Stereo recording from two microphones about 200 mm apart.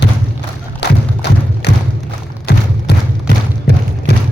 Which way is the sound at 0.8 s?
55° left (ahead or behind).